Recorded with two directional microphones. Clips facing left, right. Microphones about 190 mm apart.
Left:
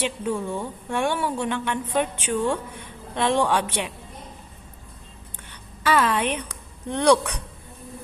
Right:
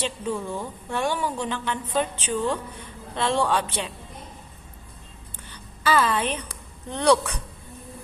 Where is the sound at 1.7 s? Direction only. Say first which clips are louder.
Left 2 dB; 10° left (ahead or behind).